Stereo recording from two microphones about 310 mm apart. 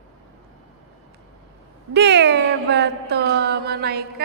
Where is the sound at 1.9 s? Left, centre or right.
Right.